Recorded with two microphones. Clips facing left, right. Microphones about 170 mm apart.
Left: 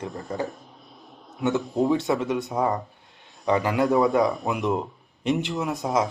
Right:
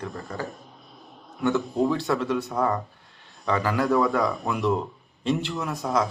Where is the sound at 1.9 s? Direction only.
20° left (ahead or behind).